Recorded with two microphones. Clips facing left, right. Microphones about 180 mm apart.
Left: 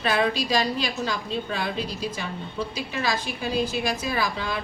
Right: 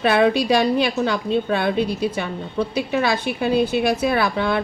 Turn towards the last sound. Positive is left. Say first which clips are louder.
# right 8 dB
turn(degrees=-65)  # may be behind; listen again after turning